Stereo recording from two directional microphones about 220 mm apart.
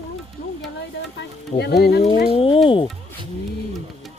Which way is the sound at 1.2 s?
50° left (ahead or behind).